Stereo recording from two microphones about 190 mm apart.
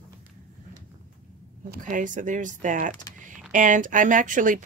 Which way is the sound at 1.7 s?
45° right (ahead or behind).